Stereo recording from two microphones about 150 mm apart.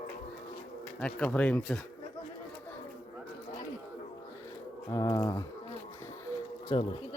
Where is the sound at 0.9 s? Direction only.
10° left (ahead or behind).